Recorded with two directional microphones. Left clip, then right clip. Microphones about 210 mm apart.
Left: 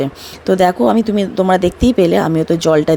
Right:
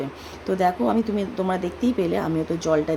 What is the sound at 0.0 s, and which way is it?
Speech, 35° left (ahead or behind).